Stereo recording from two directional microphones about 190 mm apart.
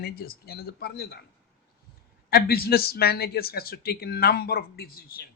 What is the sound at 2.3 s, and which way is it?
A man's voice, 55° left (ahead or behind).